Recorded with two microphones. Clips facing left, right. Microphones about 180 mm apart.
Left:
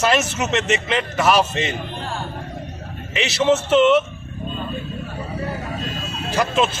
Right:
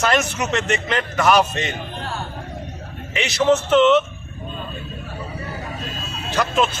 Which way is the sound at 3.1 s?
5° left (ahead or behind).